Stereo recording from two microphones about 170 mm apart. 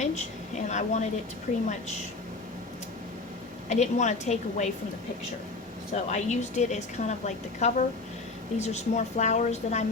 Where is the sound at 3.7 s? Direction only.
45° left (ahead or behind).